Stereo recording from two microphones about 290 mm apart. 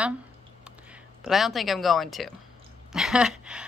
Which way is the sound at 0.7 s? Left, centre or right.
Centre.